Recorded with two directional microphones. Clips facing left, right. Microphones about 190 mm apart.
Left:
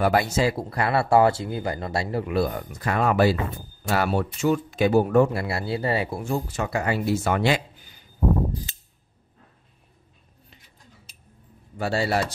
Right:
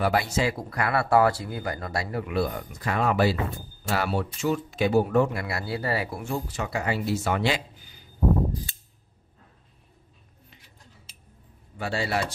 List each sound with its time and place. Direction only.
0.0 s speech: 45° left (ahead or behind); by 2.3 s 25° left (ahead or behind)
2.3 s speech: 45° left (ahead or behind)
5.3 s speech: 30° left (ahead or behind)
6.2 s speech: 45° left (ahead or behind)
11.8 s speech: 40° left (ahead or behind)